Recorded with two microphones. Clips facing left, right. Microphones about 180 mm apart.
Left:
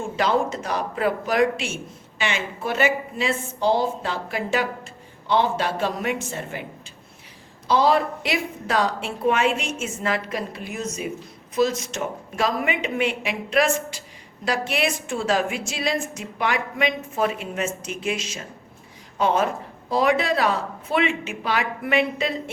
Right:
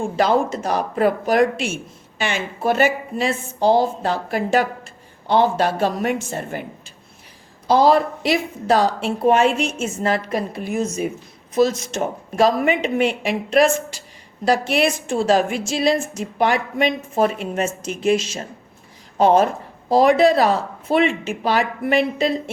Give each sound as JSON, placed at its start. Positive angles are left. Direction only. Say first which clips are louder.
{"t": 0.2, "sound": "a woman's voice", "louder": "right 4 dB", "side_deg": -40}
{"t": 7.7, "sound": "a woman's voice", "louder": "right 4 dB", "side_deg": -40}
{"t": 10.2, "sound": "a woman's voice", "louder": "right 6 dB", "side_deg": -45}
{"t": 14.7, "sound": "a woman's voice", "louder": "right 5 dB", "side_deg": -35}